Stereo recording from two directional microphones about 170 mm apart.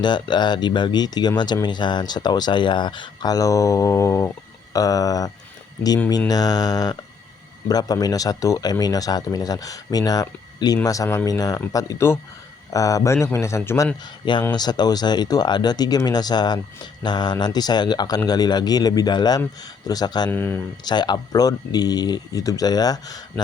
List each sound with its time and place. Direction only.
0.0 s a man's voice: 25° left (ahead or behind)
14.0 s speech: 25° left (ahead or behind)
20.3 s a man's voice: 15° left (ahead or behind)
20.8 s speech: 25° left (ahead or behind)